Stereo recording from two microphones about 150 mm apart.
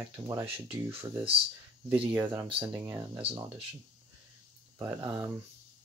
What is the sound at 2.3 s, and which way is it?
Speech, 40° right (ahead or behind).